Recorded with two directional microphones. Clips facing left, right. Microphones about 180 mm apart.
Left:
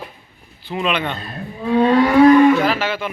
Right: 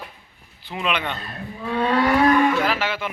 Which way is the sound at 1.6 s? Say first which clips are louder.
Left 7 dB; 20° left (ahead or behind).